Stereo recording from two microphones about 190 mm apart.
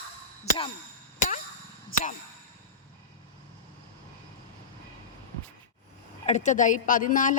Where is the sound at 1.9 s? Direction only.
40° left (ahead or behind).